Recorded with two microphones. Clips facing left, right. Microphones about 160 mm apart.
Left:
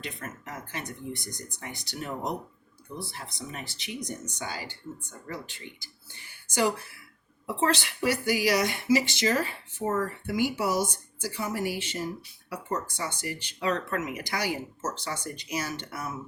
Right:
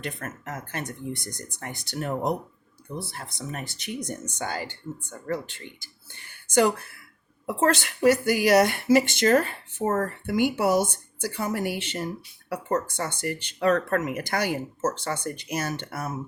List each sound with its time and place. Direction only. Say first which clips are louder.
0.0 s a woman's voice: right 4 dB; 50° right (ahead or behind)